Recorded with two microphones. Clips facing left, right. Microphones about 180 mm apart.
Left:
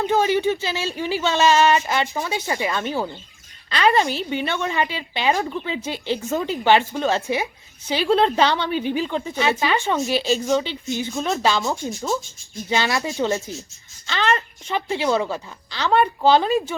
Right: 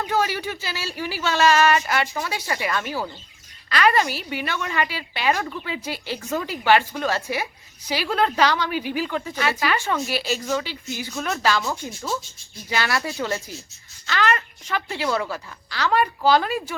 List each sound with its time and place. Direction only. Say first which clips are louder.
0.1 s a woman's voice: left 6 dB; 25° left (ahead or behind)
10.1 s a woman's voice: left 5 dB; 5° right (ahead or behind)
10.5 s a woman's voice: left 5 dB; 25° left (ahead or behind)